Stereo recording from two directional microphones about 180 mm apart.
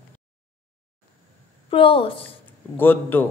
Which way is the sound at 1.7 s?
30° left (ahead or behind).